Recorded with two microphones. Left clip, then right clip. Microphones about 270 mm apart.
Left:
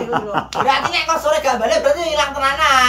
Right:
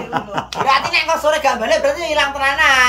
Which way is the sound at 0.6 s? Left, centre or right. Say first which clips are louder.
Left 1 dB; centre.